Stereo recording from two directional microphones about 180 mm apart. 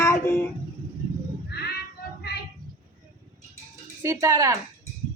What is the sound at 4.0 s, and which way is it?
Speech, 15° right (ahead or behind).